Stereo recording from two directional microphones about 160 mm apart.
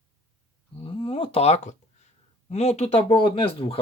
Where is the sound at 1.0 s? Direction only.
35° left (ahead or behind).